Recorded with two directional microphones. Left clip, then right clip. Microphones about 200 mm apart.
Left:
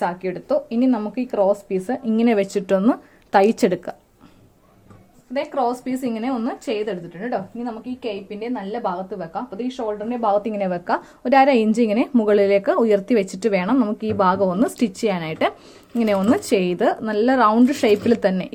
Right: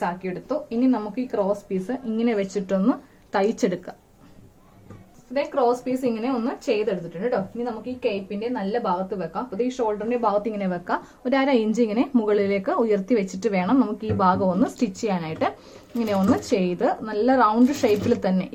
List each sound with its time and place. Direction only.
0.0 s speech: 50° left (ahead or behind)
5.3 s a woman's voice: 40° left (ahead or behind)